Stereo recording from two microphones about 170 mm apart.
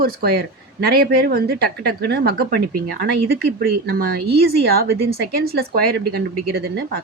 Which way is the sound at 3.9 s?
65° right (ahead or behind).